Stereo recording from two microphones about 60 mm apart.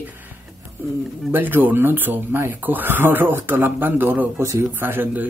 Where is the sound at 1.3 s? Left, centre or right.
Right.